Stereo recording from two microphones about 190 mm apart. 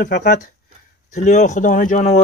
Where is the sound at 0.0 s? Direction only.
45° left (ahead or behind).